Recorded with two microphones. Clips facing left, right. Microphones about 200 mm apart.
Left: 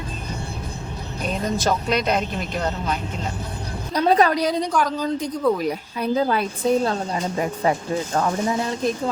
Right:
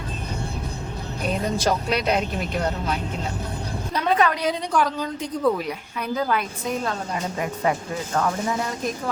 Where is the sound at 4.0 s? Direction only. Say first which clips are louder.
Left 4 dB; 35° left (ahead or behind).